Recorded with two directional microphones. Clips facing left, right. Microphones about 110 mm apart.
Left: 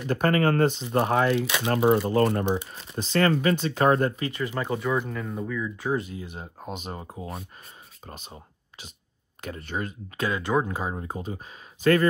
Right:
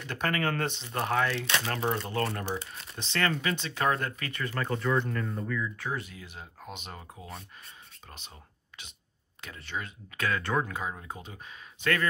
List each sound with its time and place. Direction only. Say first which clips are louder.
0.0 s speech: left 8 dB; 40° left (ahead or behind)
0.8 s speech: left 6 dB; 25° left (ahead or behind)
5.9 s speech: left 8 dB; 30° left (ahead or behind)
6.2 s speech: left 6 dB; 40° left (ahead or behind)
8.3 s a sound: left 7 dB; 35° left (ahead or behind)
9.4 s speech: left 6 dB; 45° left (ahead or behind)
10.1 s speech: left 4 dB; 25° left (ahead or behind)
10.7 s speech: left 5 dB; 35° left (ahead or behind)